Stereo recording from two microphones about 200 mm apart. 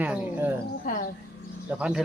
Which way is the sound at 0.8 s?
45° left (ahead or behind).